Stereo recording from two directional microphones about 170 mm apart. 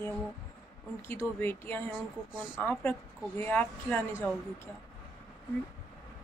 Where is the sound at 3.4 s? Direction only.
10° left (ahead or behind).